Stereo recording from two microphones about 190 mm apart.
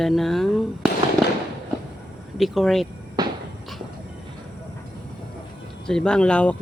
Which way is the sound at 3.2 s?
20° right (ahead or behind).